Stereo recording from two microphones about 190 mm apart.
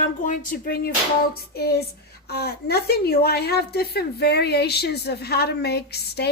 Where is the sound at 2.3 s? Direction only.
55° left (ahead or behind).